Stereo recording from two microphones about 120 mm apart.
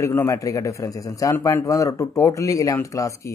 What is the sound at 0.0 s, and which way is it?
Speech, 25° left (ahead or behind).